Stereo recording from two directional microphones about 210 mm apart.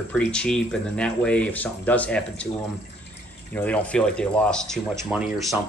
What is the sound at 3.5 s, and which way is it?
Speech, 5° left (ahead or behind).